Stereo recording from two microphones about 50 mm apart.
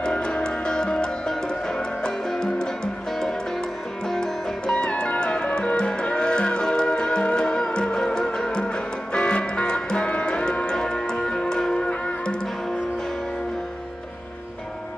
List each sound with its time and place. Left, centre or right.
0.0 s music: centre